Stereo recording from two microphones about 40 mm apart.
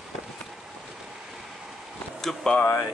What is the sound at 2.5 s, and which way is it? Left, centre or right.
Speech, left.